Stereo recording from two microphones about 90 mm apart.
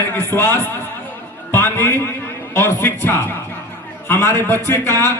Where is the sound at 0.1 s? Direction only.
20° left (ahead or behind).